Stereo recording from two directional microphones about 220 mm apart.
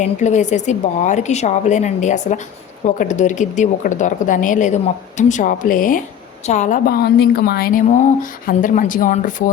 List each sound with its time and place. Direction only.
0.0 s speech: 35° left (ahead or behind)